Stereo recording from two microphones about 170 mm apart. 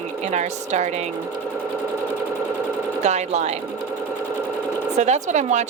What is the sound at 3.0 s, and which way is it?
Speech, 40° right (ahead or behind).